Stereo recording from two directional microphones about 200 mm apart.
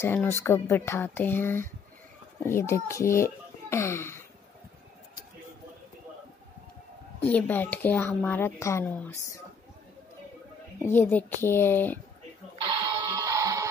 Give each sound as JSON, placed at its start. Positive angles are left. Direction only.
{"t": 0.0, "sound": "speech", "side_deg": 10}
{"t": 7.2, "sound": "speech", "side_deg": 5}
{"t": 10.8, "sound": "speech", "side_deg": 10}
{"t": 12.6, "sound": "music", "side_deg": -25}